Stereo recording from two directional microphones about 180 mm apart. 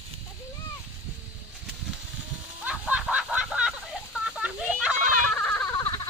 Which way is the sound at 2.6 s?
5° right (ahead or behind).